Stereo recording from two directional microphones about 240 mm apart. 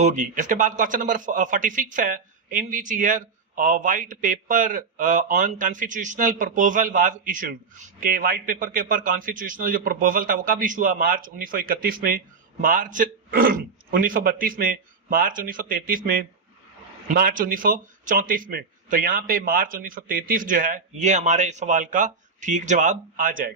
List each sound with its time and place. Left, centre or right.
0.0 s a man's voice: right